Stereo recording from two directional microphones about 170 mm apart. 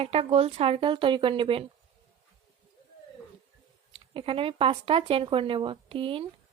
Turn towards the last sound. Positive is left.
turn(degrees=-30)  # may be behind; listen again after turning